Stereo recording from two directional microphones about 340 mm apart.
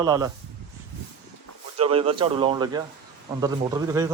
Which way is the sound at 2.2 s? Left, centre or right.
Centre.